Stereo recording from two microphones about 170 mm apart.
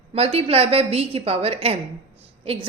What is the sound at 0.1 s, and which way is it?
A woman's voice, 35° right (ahead or behind).